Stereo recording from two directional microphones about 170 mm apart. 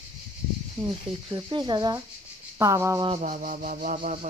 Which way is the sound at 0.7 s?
25° right (ahead or behind).